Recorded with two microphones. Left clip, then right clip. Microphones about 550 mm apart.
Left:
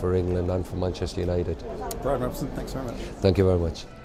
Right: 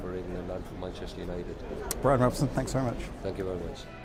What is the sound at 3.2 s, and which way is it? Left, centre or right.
Speech, left.